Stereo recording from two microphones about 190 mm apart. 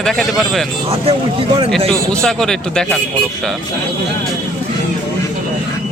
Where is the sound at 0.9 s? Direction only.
30° right (ahead or behind).